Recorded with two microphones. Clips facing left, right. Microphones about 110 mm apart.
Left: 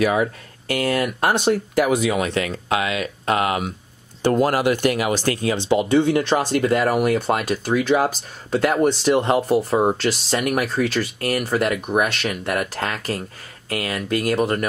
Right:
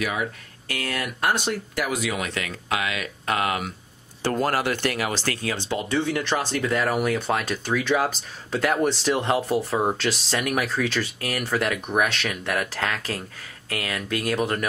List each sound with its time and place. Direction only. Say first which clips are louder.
0.0 s speech: left 8 dB; 40° left (ahead or behind)
0.7 s speech: left 9 dB; 30° left (ahead or behind)
4.4 s speech: left 4 dB; 15° left (ahead or behind)